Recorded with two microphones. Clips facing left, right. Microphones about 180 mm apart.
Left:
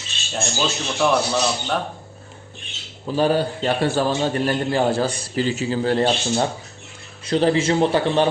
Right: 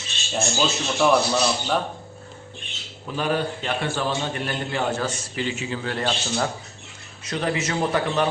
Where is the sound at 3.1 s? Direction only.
35° left (ahead or behind).